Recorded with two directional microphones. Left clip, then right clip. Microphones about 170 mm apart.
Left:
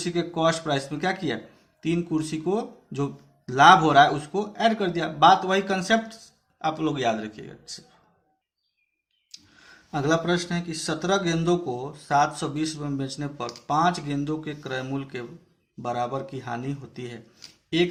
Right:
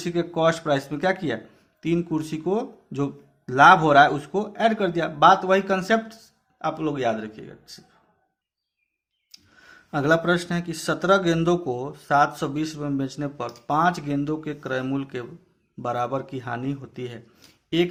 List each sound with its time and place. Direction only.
0.0 s speech: 30° right (ahead or behind)
9.3 s speech: 30° right (ahead or behind)